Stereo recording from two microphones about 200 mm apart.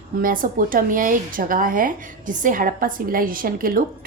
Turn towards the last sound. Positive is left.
turn(degrees=-45)  # may be behind; listen again after turning